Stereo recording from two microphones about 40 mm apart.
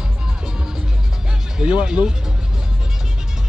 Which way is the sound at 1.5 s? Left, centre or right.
Right.